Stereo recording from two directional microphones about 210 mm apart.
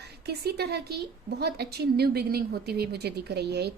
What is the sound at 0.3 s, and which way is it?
A woman's voice, 50° right (ahead or behind).